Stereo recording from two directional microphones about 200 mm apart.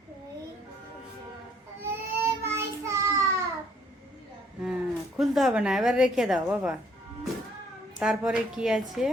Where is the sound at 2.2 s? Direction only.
15° right (ahead or behind).